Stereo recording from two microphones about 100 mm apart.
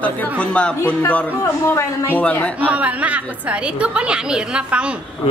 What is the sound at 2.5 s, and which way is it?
A woman's voice, 15° right (ahead or behind).